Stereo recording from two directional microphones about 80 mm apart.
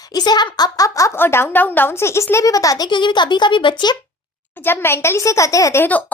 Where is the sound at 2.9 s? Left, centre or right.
Left.